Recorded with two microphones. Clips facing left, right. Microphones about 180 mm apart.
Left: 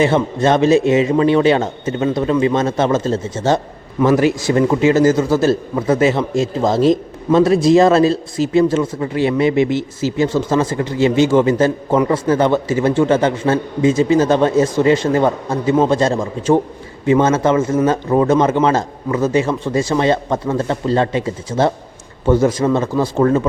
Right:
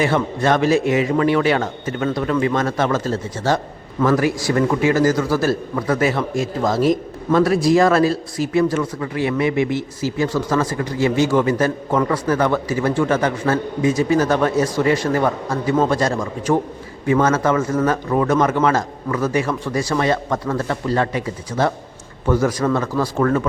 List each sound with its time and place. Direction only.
0.0 s a man's voice: 25° left (ahead or behind)